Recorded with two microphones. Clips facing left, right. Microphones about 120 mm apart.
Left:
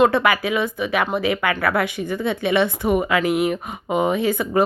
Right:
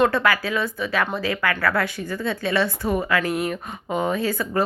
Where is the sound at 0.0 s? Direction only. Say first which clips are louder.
Left 3 dB; 20° left (ahead or behind).